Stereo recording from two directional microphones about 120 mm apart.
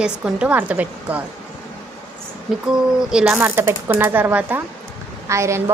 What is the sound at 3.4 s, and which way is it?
A woman's voice, 20° right (ahead or behind).